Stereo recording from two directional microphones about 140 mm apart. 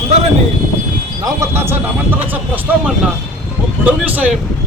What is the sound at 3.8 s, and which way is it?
Speech, 10° right (ahead or behind).